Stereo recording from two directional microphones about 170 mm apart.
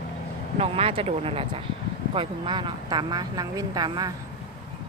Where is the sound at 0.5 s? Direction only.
35° right (ahead or behind).